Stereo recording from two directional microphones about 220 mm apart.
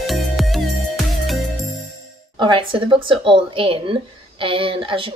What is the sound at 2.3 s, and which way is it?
A woman's voice, 20° right (ahead or behind).